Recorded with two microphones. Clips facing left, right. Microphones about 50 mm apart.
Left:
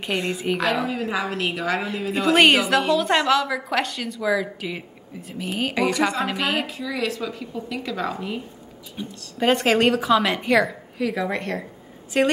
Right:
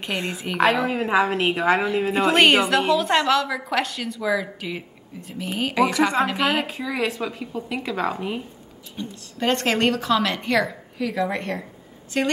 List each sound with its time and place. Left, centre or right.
0.3 s a woman's voice: centre
0.8 s a woman's voice: right
2.2 s a woman's voice: centre
6.8 s a woman's voice: right
8.9 s a woman's voice: centre
12.1 s a woman's voice: centre